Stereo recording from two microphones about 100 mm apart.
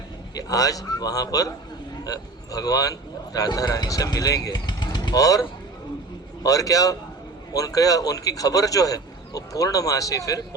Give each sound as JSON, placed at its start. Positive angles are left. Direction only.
{"t": 0.3, "sound": "a man's voice", "side_deg": 35}